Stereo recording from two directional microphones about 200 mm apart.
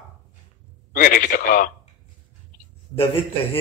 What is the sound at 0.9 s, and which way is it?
Speech, 45° left (ahead or behind).